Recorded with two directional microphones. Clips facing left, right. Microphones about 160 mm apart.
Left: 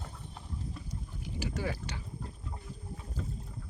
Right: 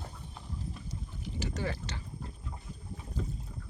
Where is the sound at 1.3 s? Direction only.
10° left (ahead or behind).